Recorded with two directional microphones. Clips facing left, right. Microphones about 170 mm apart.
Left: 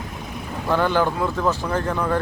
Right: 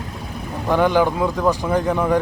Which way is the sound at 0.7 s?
15° right (ahead or behind).